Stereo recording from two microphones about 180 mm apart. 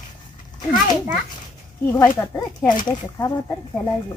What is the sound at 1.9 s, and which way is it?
Speech, 15° left (ahead or behind).